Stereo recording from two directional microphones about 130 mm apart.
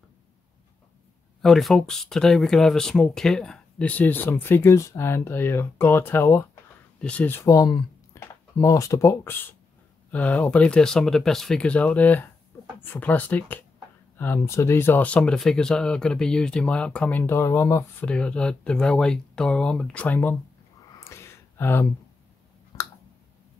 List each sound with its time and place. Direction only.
1.4 s speech: centre (ahead or behind)
17.2 s speech: 20° left (ahead or behind)
18.0 s speech: 10° left (ahead or behind)
21.0 s a sound: 20° left (ahead or behind)
22.7 s clicking: 30° left (ahead or behind)